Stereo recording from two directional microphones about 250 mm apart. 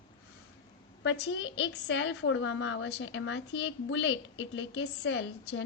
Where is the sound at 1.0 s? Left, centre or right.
Left.